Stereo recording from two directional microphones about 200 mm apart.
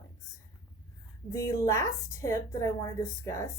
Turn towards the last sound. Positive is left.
turn(degrees=15)  # may be behind; listen again after turning